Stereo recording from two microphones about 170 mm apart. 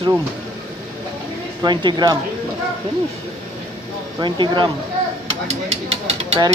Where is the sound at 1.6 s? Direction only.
25° right (ahead or behind).